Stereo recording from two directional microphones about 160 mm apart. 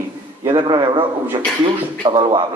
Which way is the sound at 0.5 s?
30° right (ahead or behind).